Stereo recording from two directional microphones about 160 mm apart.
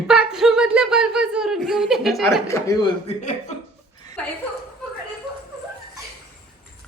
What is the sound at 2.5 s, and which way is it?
Speech, 20° left (ahead or behind).